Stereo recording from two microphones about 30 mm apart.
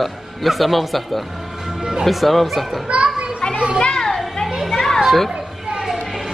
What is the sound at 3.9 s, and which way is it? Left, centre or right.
Children playing, centre.